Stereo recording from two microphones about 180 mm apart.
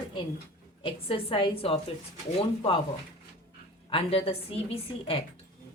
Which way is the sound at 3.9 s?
30° left (ahead or behind).